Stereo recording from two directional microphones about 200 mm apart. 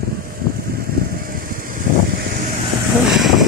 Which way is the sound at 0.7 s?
50° right (ahead or behind).